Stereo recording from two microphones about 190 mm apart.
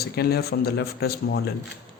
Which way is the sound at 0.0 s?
55° left (ahead or behind).